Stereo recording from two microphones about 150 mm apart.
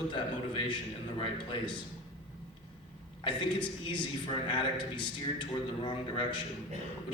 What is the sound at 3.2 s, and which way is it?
A man's voice, 35° left (ahead or behind).